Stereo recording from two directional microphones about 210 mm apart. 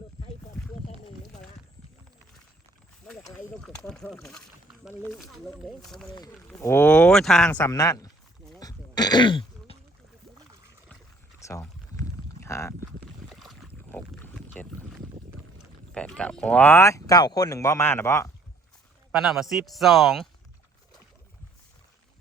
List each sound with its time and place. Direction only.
3.6 s speech: 5° left (ahead or behind)
6.1 s speech: 15° left (ahead or behind)
8.5 s throat clearing: 20° left (ahead or behind)
11.3 s a sound: 15° left (ahead or behind)
11.6 s pour: 10° left (ahead or behind)
13.0 s boat: centre (ahead or behind)
15.9 s speech: 5° left (ahead or behind)
19.1 s speech: centre (ahead or behind)